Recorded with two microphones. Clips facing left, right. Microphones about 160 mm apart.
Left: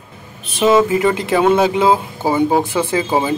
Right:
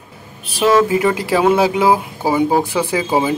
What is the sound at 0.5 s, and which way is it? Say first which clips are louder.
Speech: left 1 dB; 25° left (ahead or behind).